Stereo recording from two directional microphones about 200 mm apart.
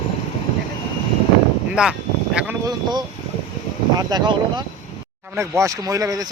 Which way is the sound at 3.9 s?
20° right (ahead or behind).